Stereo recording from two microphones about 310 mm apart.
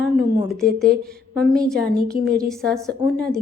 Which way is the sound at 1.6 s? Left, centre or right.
Centre.